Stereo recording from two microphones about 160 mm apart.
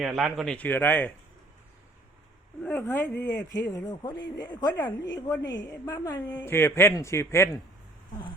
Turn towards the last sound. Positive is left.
turn(degrees=15)  # may be behind; listen again after turning